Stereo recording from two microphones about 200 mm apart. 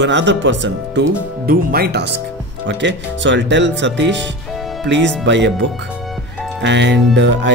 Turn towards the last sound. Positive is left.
turn(degrees=-60)  # may be behind; listen again after turning